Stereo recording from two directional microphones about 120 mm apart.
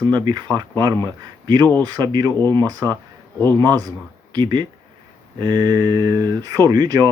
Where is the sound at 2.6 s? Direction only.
30° right (ahead or behind).